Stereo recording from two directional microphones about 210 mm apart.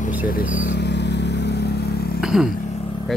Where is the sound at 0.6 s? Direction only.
55° left (ahead or behind).